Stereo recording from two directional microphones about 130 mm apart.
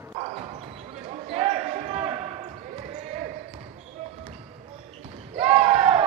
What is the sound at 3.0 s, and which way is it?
Basketball bounce, 55° right (ahead or behind).